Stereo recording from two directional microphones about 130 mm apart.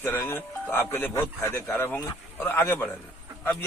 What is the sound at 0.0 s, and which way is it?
A man's voice, 20° left (ahead or behind).